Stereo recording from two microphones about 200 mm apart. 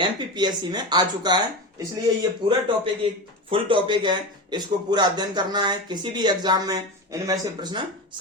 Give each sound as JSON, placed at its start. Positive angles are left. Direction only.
{"t": 0.0, "sound": "speech", "side_deg": -20}